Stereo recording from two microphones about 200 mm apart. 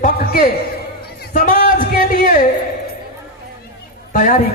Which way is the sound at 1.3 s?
40° left (ahead or behind).